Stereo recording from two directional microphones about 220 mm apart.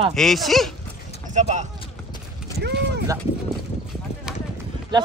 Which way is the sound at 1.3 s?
30° right (ahead or behind).